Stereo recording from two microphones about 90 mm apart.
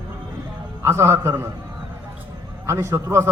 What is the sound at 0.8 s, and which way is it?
Speech, 30° right (ahead or behind).